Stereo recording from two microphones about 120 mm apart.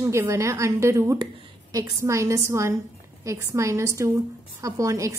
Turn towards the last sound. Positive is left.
turn(degrees=-25)  # may be behind; listen again after turning